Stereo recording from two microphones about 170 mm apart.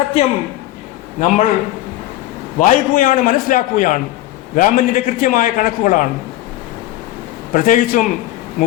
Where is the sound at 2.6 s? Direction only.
55° left (ahead or behind).